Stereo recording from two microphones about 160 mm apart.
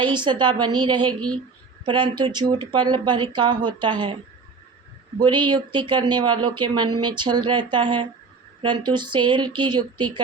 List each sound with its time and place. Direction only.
0.0 s speech: 30° right (ahead or behind)
5.2 s speech: 30° right (ahead or behind)